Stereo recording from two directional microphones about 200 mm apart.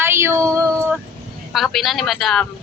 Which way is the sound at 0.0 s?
10° right (ahead or behind).